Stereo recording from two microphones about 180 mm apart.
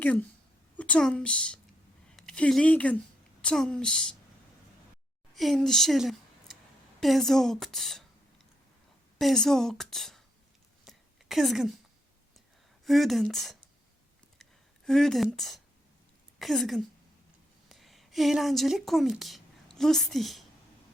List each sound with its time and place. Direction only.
0.0 s a woman's voice: 10° left (ahead or behind)
5.3 s a woman's voice: centre (ahead or behind)
9.1 s a woman's voice: 5° left (ahead or behind)
10.8 s a sound: centre (ahead or behind)
12.8 s a woman's voice: centre (ahead or behind)
14.8 s a woman's voice: centre (ahead or behind)